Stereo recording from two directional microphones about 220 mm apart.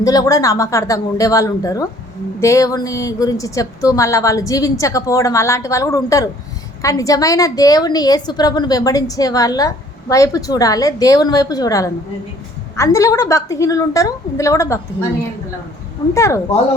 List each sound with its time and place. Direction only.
0.0 s a woman's voice: 15° left (ahead or behind)
16.1 s a woman's voice: 15° left (ahead or behind)